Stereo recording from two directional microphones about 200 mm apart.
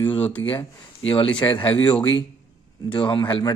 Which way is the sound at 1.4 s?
15° left (ahead or behind).